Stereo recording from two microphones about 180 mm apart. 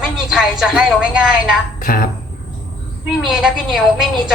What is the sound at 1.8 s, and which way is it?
Speech, 50° left (ahead or behind).